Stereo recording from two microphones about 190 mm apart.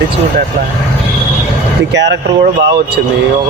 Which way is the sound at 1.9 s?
65° right (ahead or behind).